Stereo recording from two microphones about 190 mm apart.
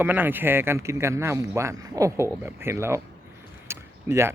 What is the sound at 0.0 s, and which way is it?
Speech, 10° right (ahead or behind).